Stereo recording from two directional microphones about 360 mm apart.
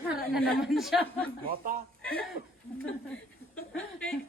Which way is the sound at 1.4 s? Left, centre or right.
Right.